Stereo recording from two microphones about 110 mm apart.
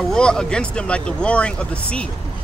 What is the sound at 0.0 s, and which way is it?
Speech, 5° left (ahead or behind).